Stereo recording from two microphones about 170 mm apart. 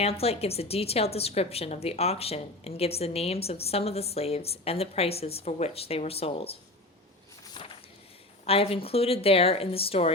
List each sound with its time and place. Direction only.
0.0 s a woman's voice: 35° left (ahead or behind)
7.5 s a sound: 30° left (ahead or behind)
8.4 s a woman's voice: 35° left (ahead or behind)